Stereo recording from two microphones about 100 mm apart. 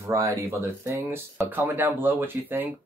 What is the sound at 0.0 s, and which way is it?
Speech, 30° right (ahead or behind).